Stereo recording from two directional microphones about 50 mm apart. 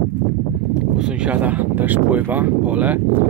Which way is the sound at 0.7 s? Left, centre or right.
Centre.